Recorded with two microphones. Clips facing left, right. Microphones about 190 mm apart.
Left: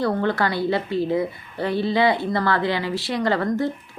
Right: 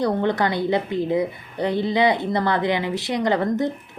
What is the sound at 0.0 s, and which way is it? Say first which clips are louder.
A woman's voice: right 1 dB; 20° right (ahead or behind).